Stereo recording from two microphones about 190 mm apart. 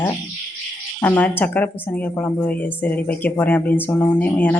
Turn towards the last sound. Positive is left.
turn(degrees=10)  # may be behind; listen again after turning